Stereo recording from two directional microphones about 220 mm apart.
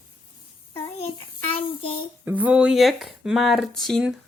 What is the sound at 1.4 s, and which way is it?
Child singing, 25° left (ahead or behind).